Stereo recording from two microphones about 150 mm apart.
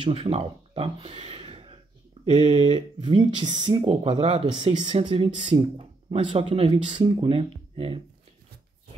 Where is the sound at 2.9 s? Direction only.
35° right (ahead or behind).